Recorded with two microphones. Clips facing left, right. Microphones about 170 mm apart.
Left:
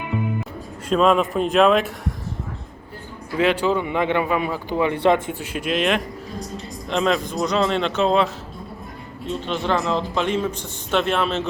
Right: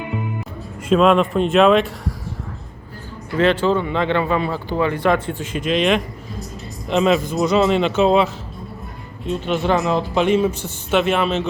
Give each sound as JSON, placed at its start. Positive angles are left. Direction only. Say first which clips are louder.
{"t": 0.9, "sound": "speech", "louder": "right 3 dB", "side_deg": 0}
{"t": 3.3, "sound": "speech", "louder": "right 3 dB", "side_deg": 10}
{"t": 4.9, "sound": "speech", "louder": "left 2 dB", "side_deg": 20}
{"t": 5.5, "sound": "speech", "louder": "right 3 dB", "side_deg": 5}
{"t": 9.5, "sound": "a man's voice", "louder": "right 4 dB", "side_deg": -10}